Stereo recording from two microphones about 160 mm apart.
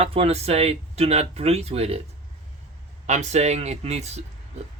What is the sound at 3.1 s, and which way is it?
Speech, 45° right (ahead or behind).